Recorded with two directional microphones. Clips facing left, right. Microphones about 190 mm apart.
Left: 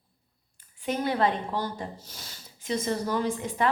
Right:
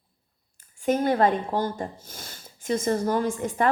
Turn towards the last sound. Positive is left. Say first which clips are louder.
# right 3 dB
turn(degrees=-50)  # may be behind; listen again after turning